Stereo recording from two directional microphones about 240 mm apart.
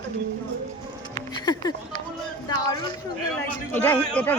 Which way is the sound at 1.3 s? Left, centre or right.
Centre.